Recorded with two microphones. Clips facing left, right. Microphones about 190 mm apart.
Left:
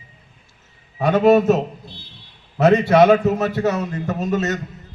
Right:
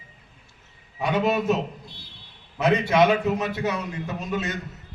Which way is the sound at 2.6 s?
40° left (ahead or behind).